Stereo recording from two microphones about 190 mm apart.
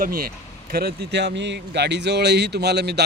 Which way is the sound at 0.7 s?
60° right (ahead or behind).